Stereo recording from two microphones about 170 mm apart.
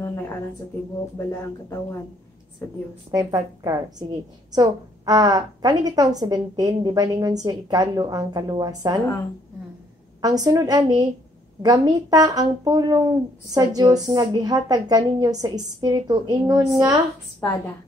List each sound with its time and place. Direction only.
0.0 s a sound: 15° left (ahead or behind)
1.1 s speech: 15° left (ahead or behind)
3.1 s speech: 20° right (ahead or behind)
10.2 s speech: 20° right (ahead or behind)